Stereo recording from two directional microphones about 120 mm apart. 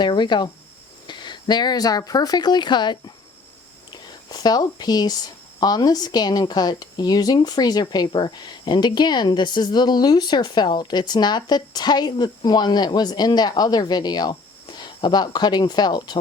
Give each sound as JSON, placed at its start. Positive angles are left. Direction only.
{"t": 0.0, "sound": "a woman's voice", "side_deg": 40}
{"t": 3.9, "sound": "whispering", "side_deg": 35}
{"t": 5.5, "sound": "a woman's voice", "side_deg": 35}